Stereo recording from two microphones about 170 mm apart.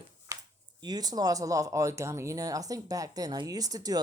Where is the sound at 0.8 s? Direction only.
25° right (ahead or behind).